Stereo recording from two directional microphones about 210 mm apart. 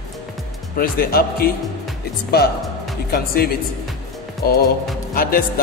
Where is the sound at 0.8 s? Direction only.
45° left (ahead or behind).